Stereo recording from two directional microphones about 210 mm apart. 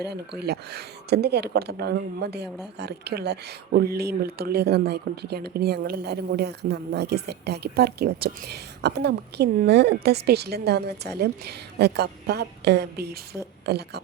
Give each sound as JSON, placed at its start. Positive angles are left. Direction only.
{"t": 0.0, "sound": "speech", "side_deg": -50}